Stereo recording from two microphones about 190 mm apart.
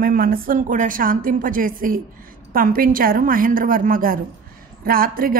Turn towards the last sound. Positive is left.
turn(degrees=-50)  # may be behind; listen again after turning